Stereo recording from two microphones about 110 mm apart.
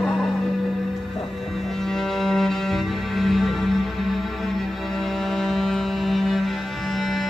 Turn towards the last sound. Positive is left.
turn(degrees=0)  # may be behind; listen again after turning